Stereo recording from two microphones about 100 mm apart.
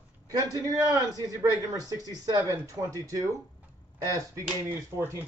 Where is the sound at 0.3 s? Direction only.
40° right (ahead or behind).